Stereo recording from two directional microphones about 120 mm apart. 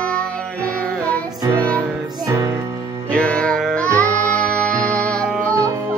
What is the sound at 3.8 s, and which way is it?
Music, 20° right (ahead or behind).